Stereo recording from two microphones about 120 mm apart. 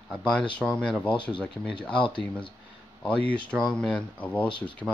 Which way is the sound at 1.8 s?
40° left (ahead or behind).